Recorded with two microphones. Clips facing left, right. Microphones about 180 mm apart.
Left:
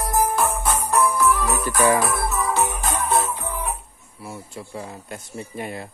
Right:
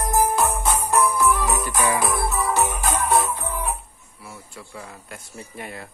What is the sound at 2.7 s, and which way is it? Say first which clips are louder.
Music: right 1 dB; 15° right (ahead or behind).